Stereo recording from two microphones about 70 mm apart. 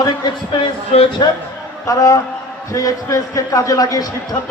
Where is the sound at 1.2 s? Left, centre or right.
Left.